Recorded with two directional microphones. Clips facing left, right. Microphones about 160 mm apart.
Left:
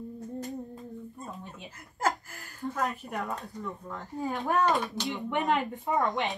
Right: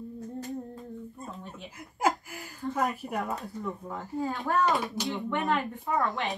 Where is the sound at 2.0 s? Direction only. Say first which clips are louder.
Right 2 dB; 10° right (ahead or behind).